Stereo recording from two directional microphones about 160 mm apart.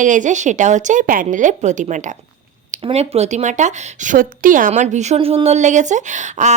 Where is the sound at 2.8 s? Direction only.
40° right (ahead or behind).